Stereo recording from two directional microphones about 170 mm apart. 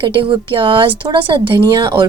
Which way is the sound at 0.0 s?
30° right (ahead or behind).